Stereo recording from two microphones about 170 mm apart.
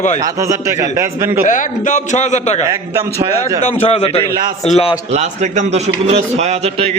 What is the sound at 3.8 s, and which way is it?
A man's voice, 35° left (ahead or behind).